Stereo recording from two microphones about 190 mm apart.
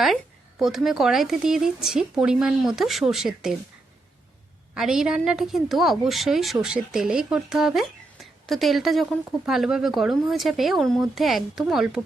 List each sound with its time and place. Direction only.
0.6 s a woman's voice: centre (ahead or behind)
4.7 s a woman's voice: 5° right (ahead or behind)